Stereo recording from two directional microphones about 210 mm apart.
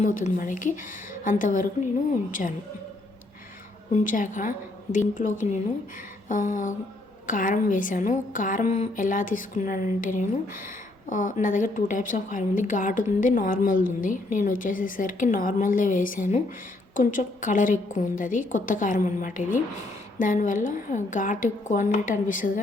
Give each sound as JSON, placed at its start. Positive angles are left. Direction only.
{"t": 0.0, "sound": "a woman's voice", "side_deg": 35}
{"t": 3.9, "sound": "a woman's voice", "side_deg": 40}